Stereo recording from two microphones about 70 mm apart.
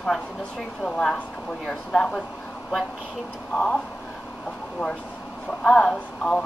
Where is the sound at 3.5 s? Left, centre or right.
Centre.